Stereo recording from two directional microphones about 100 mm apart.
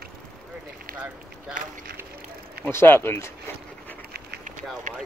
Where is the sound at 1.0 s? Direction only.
20° right (ahead or behind).